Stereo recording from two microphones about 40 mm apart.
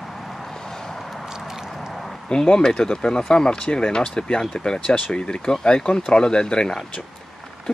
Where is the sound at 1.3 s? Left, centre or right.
Centre.